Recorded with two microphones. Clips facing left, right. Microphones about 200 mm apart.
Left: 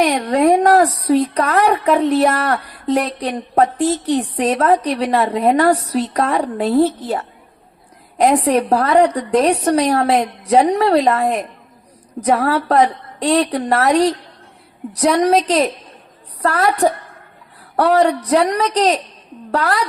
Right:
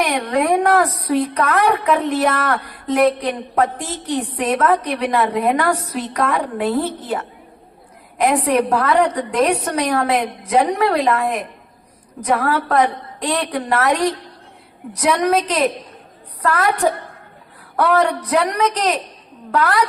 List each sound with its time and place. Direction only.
0.0 s a woman's voice: 30° left (ahead or behind)
8.4 s a woman's voice: 35° left (ahead or behind)